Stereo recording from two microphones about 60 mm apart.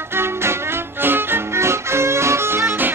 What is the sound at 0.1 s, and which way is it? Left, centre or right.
Music, right.